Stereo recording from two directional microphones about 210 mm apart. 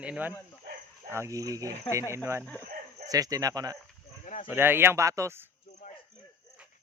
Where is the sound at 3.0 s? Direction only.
15° right (ahead or behind).